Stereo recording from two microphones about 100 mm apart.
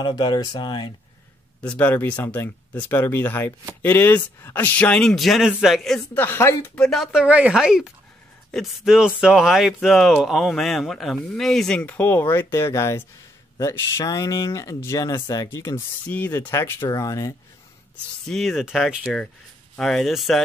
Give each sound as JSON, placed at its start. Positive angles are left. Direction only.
{"t": 0.0, "sound": "speech", "side_deg": 50}
{"t": 1.6, "sound": "speech", "side_deg": 15}
{"t": 6.1, "sound": "speech", "side_deg": 20}
{"t": 6.7, "sound": "speech", "side_deg": 5}
{"t": 7.1, "sound": "speech", "side_deg": -10}
{"t": 11.8, "sound": "speech", "side_deg": 20}
{"t": 15.1, "sound": "speech", "side_deg": 45}
{"t": 15.4, "sound": "speech", "side_deg": 25}
{"t": 16.9, "sound": "speech", "side_deg": 35}
{"t": 18.2, "sound": "speech", "side_deg": 0}